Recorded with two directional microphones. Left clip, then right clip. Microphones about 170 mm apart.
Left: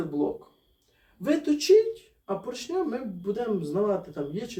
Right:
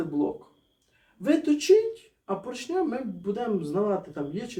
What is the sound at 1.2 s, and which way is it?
Speech, 5° right (ahead or behind).